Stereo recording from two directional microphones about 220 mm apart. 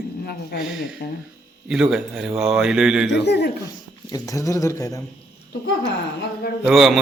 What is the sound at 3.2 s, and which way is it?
Speech, 50° left (ahead or behind).